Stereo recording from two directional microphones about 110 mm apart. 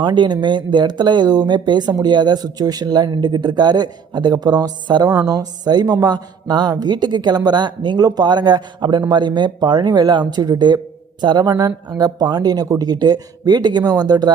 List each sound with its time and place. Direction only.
0.0 s speech: 45° right (ahead or behind)